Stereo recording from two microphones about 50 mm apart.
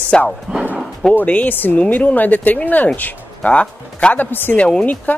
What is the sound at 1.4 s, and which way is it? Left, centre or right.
Speech, left.